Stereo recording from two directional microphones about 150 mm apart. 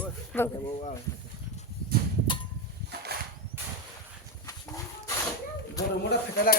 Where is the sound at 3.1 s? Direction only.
90° right.